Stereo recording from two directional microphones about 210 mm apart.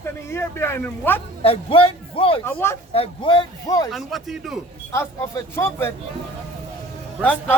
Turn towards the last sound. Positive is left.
turn(degrees=5)  # may be behind; listen again after turning